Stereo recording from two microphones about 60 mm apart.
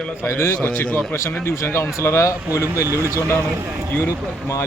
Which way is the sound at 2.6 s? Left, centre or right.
Right.